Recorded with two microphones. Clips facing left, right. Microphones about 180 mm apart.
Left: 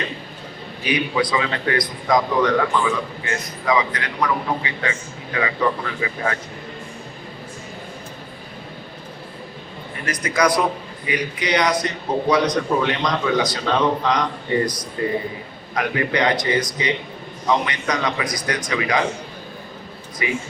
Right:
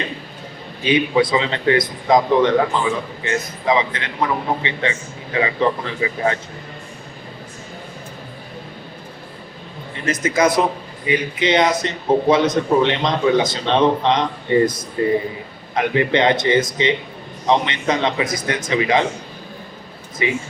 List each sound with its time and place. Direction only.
0.9 s speech: 25° right (ahead or behind)
10.1 s speech: 25° right (ahead or behind)
20.2 s speech: 25° right (ahead or behind)